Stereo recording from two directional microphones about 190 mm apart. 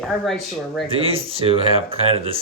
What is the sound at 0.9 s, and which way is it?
Speech, 30° right (ahead or behind).